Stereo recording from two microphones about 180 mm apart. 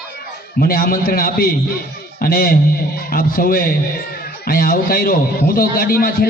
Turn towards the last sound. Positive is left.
turn(degrees=55)  # may be behind; listen again after turning